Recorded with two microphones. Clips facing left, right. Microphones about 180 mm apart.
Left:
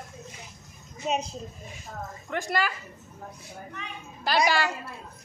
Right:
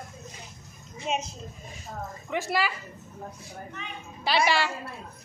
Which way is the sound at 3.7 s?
Centre (ahead or behind).